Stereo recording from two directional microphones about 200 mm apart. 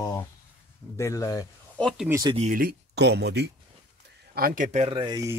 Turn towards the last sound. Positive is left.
turn(degrees=-20)  # may be behind; listen again after turning